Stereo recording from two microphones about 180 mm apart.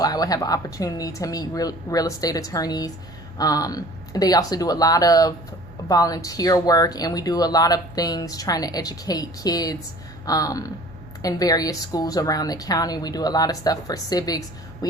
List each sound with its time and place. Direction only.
0.0 s speech: 20° left (ahead or behind)